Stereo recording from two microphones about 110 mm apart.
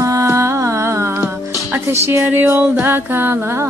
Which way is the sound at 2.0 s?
25° right (ahead or behind).